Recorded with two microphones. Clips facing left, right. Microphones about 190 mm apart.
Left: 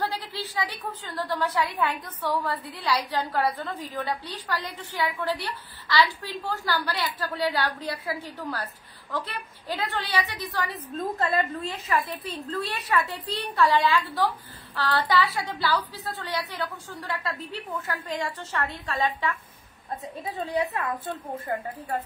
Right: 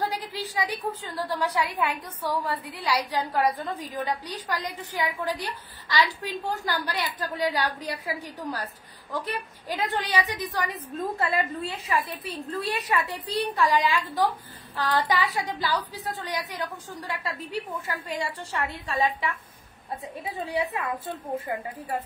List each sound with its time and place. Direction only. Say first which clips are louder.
0.0 s a sound: right 1 dB; 15° right (ahead or behind)
1.1 s a woman's voice: left 2 dB; 10° right (ahead or behind)
17.8 s a woman's voice: left 1 dB; 15° right (ahead or behind)